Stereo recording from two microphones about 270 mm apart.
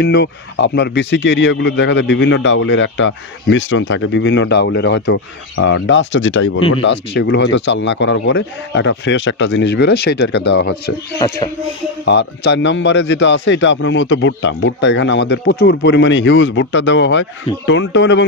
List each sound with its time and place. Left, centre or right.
0.0 s speech: left
11.1 s music: centre
12.0 s speech: left